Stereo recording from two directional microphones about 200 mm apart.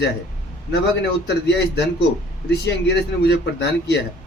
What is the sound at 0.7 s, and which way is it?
Speech, 55° left (ahead or behind).